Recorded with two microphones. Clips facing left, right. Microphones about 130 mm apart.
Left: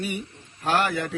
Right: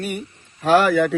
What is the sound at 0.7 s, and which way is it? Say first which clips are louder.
Speech: right 9 dB; 90° right.